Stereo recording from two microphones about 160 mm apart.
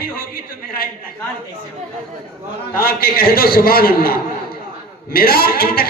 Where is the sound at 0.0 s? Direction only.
70° left (ahead or behind).